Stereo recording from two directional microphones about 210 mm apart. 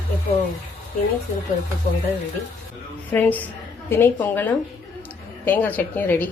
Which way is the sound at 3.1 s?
10° left (ahead or behind).